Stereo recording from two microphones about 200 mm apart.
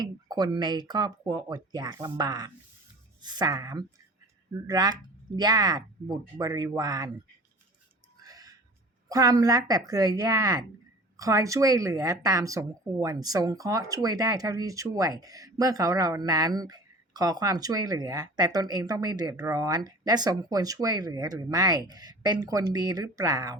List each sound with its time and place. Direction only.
0.0 s a woman's voice: 20° right (ahead or behind)
8.2 s a sound: 20° right (ahead or behind)
9.0 s a woman's voice: 20° right (ahead or behind)